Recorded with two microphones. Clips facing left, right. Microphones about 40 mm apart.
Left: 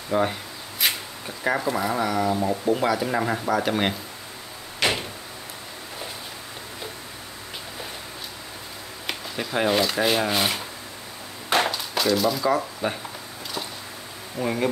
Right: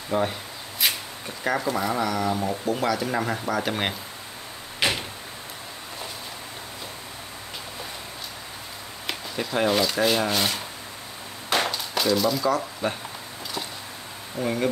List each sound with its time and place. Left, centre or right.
0.1 s speech: centre
0.8 s a sound: centre
1.4 s speech: centre
9.0 s speech: centre
11.5 s a sound: centre
12.8 s speech: centre
14.4 s speech: centre